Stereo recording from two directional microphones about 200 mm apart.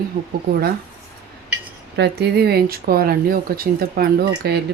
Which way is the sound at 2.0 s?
55° right (ahead or behind).